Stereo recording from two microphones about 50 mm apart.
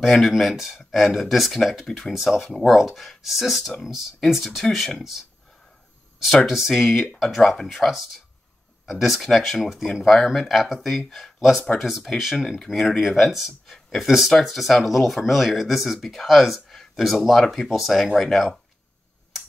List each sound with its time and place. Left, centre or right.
0.0 s speech: centre